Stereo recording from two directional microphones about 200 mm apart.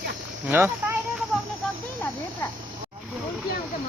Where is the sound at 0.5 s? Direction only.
10° right (ahead or behind).